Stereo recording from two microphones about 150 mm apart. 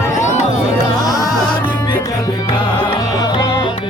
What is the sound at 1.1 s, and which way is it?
Music, 20° left (ahead or behind).